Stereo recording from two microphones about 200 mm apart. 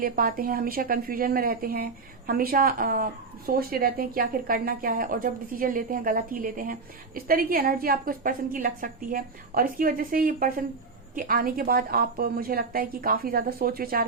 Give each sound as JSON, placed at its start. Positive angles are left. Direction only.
{"t": 0.0, "sound": "speech", "side_deg": -45}